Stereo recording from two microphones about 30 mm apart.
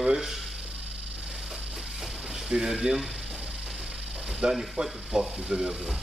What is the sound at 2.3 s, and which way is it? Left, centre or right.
Speech, centre.